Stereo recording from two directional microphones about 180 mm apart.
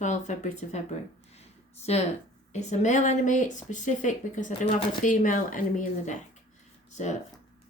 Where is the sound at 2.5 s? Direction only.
40° left (ahead or behind).